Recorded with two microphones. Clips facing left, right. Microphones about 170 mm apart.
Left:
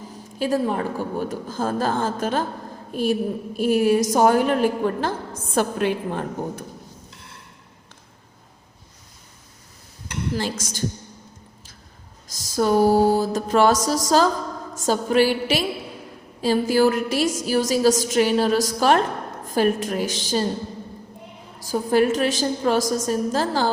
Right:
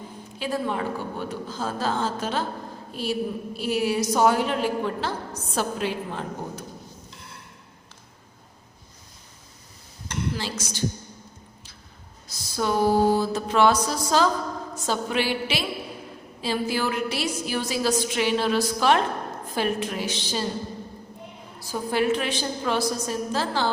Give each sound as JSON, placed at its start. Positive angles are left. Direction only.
{"t": 0.3, "sound": "a woman's voice", "side_deg": 45}
{"t": 10.3, "sound": "a woman's voice", "side_deg": 50}
{"t": 12.5, "sound": "a sound", "side_deg": 40}
{"t": 13.8, "sound": "a woman's voice", "side_deg": 40}
{"t": 21.7, "sound": "a woman's voice", "side_deg": 45}